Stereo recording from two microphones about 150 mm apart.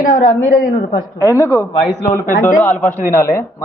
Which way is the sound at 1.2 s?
20° left (ahead or behind).